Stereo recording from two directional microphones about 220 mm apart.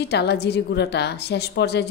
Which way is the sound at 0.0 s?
50° left (ahead or behind).